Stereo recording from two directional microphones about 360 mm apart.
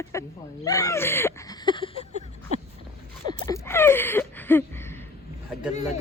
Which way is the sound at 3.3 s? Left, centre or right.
Centre.